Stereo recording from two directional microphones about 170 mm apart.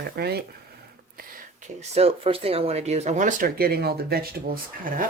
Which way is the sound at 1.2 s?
50° right (ahead or behind).